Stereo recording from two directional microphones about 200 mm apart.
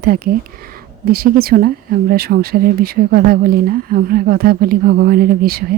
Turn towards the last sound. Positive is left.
turn(degrees=-50)  # may be behind; listen again after turning